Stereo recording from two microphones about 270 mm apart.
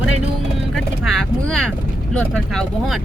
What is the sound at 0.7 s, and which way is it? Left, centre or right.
Vehicle, centre.